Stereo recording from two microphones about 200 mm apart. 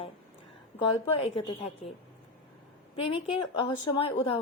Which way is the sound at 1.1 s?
30° left (ahead or behind).